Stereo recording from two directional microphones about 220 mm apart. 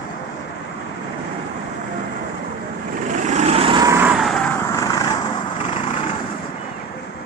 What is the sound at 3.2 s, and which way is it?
Vehicle, 30° right (ahead or behind).